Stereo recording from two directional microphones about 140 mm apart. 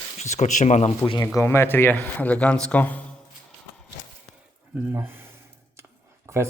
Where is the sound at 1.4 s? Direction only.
15° left (ahead or behind).